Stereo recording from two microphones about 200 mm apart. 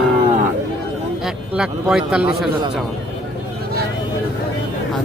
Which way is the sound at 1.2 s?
5° right (ahead or behind).